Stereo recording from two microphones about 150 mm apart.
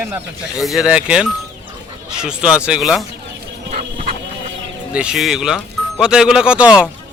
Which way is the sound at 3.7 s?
65° right (ahead or behind).